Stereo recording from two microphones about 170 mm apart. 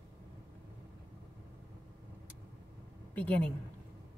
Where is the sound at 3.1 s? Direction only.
10° left (ahead or behind).